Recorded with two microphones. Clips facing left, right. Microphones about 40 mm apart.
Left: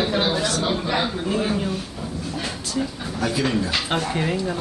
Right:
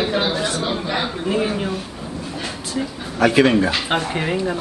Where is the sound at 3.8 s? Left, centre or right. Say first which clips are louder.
Right 2 dB; centre.